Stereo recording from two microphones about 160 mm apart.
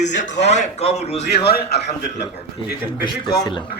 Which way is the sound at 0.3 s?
90° left.